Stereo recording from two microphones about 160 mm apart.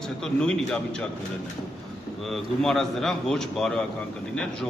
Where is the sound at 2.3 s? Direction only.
Centre (ahead or behind).